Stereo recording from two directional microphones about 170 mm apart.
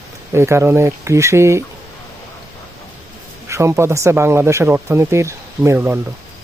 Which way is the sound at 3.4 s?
15° right (ahead or behind).